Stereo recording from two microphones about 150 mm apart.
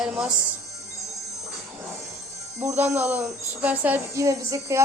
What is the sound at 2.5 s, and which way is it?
A woman's voice, 15° right (ahead or behind).